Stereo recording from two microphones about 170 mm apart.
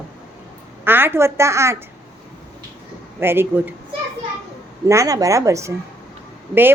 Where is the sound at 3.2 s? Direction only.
15° right (ahead or behind).